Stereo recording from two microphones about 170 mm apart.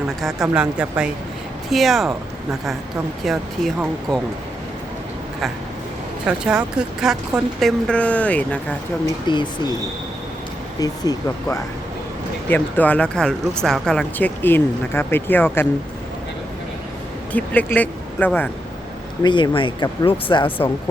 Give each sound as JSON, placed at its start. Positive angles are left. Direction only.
{"t": 0.3, "sound": "speech", "side_deg": -10}
{"t": 6.2, "sound": "speech", "side_deg": -5}
{"t": 9.2, "sound": "speech", "side_deg": 25}
{"t": 10.8, "sound": "speech", "side_deg": 20}
{"t": 12.5, "sound": "speech", "side_deg": 10}
{"t": 17.3, "sound": "speech", "side_deg": 10}
{"t": 19.2, "sound": "speech", "side_deg": 30}